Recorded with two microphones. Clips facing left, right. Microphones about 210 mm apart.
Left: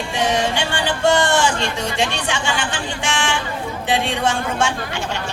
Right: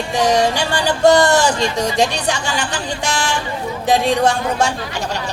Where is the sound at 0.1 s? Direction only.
40° right (ahead or behind).